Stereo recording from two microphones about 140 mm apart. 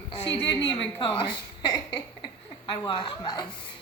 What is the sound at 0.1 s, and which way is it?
Speech, 35° left (ahead or behind).